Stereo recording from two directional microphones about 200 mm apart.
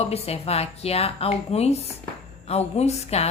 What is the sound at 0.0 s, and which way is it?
A woman's voice, 30° left (ahead or behind).